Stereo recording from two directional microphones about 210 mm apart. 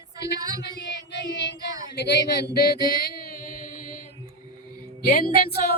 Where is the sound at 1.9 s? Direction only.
50° left (ahead or behind).